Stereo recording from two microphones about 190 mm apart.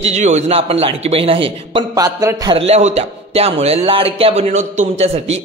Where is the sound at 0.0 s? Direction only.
35° right (ahead or behind); by 2.5 s 20° right (ahead or behind).